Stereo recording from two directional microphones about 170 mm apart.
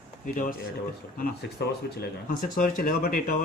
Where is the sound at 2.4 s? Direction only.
50° left (ahead or behind).